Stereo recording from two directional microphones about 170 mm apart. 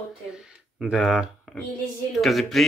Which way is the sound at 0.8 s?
Centre (ahead or behind).